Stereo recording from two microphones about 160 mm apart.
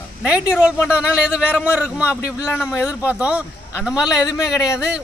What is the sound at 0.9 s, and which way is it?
A man's voice, 5° right (ahead or behind).